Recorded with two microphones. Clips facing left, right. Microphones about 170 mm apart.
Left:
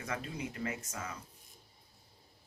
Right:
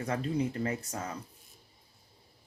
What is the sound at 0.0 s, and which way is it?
Speech, 35° right (ahead or behind).